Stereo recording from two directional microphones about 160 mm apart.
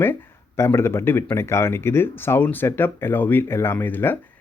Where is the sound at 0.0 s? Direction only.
15° left (ahead or behind).